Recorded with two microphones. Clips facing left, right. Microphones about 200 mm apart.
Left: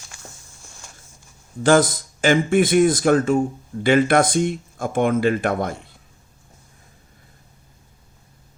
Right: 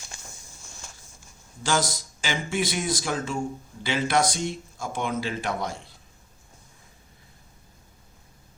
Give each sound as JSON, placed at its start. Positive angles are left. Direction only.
{"t": 1.6, "sound": "speech", "side_deg": 55}